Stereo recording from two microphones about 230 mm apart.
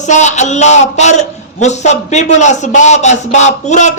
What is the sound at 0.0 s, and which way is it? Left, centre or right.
Speech, left.